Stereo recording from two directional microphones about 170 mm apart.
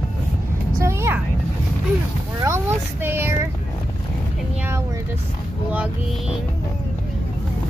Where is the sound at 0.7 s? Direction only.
15° right (ahead or behind).